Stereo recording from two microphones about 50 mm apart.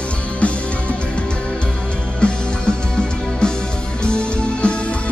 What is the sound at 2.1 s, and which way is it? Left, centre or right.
Music, centre.